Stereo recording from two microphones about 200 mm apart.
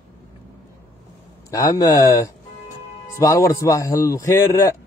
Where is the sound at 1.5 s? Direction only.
15° left (ahead or behind).